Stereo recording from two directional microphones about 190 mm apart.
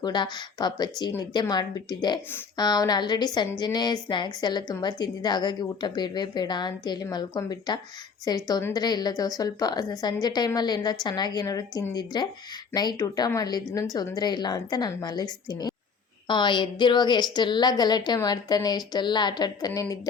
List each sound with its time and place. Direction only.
0.0 s a woman's voice: 20° left (ahead or behind)